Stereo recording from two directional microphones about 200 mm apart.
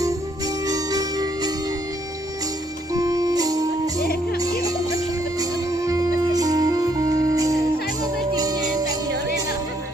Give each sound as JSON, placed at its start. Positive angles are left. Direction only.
{"t": 0.7, "sound": "music", "side_deg": -20}
{"t": 2.9, "sound": "music", "side_deg": -20}